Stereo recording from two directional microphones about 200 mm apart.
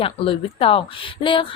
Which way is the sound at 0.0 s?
30° left (ahead or behind).